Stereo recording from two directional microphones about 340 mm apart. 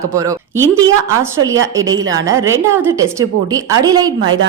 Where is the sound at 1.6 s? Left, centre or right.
Right.